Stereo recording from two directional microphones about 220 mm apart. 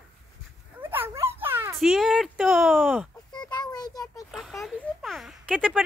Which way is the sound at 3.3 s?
20° left (ahead or behind).